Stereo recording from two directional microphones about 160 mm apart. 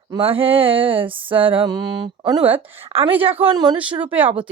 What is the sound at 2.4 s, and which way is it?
Speech, 10° right (ahead or behind).